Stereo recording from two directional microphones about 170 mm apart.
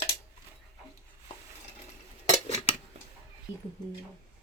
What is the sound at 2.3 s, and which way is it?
Cutlery, 40° left (ahead or behind).